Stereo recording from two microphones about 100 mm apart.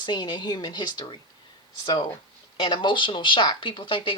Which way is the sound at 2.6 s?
55° left (ahead or behind).